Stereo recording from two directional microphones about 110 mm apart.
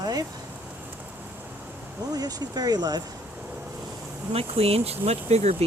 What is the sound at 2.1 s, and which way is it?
Speech, 35° right (ahead or behind).